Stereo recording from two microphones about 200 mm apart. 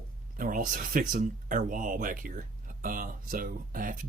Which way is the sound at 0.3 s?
40° right (ahead or behind).